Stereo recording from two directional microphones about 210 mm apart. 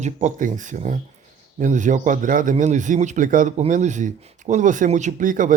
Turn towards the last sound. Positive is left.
turn(degrees=-40)  # may be behind; listen again after turning